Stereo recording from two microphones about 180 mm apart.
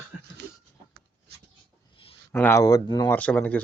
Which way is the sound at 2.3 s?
15° left (ahead or behind).